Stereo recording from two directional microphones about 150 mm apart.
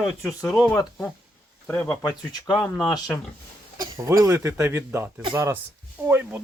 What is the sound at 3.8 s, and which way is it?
Speech, 20° right (ahead or behind).